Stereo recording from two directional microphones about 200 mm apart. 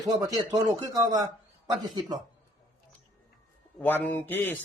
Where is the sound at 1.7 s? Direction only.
20° right (ahead or behind).